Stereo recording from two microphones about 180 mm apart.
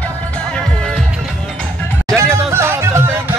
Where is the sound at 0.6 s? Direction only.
5° left (ahead or behind).